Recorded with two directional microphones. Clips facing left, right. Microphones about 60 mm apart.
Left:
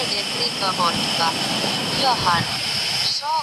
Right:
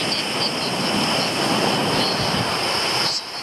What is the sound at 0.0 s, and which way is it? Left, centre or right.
Vehicle, right.